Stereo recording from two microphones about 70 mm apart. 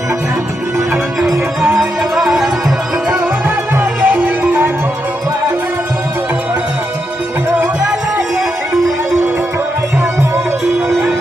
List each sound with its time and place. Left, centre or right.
1.8 s music: centre
3.8 s music: right